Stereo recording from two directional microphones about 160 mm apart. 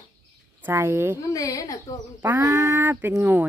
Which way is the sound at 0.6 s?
15° right (ahead or behind).